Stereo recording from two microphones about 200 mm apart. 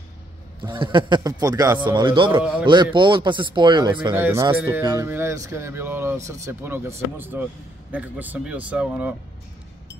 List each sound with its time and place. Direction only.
0.7 s a man's voice: 25° right (ahead or behind)
4.1 s speech: 10° right (ahead or behind)